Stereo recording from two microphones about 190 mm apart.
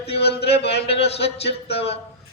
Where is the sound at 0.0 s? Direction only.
30° left (ahead or behind).